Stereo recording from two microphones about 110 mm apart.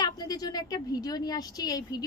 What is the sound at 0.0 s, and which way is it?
A woman's voice, 35° left (ahead or behind).